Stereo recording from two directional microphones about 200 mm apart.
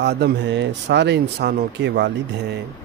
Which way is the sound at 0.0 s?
55° right (ahead or behind).